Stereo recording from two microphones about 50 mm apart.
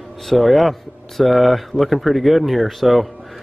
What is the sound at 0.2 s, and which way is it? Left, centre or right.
Speech, centre.